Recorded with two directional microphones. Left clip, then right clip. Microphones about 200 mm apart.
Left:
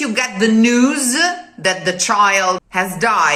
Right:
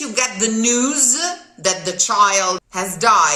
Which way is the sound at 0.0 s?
15° right (ahead or behind).